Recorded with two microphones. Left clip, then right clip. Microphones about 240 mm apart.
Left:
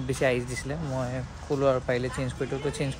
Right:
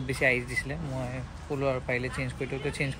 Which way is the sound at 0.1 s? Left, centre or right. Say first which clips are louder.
Even; centre.